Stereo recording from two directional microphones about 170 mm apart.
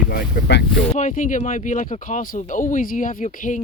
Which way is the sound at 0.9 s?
50° left (ahead or behind).